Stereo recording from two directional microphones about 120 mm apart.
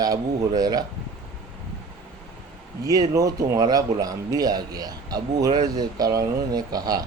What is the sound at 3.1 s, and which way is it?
Speech, 30° right (ahead or behind).